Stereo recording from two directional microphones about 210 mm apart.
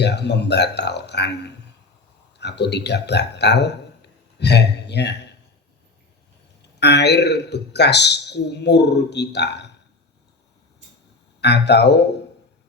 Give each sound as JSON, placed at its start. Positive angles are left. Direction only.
{"t": 0.0, "sound": "a man's voice", "side_deg": 55}
{"t": 6.7, "sound": "a man's voice", "side_deg": 55}
{"t": 11.3, "sound": "a man's voice", "side_deg": 55}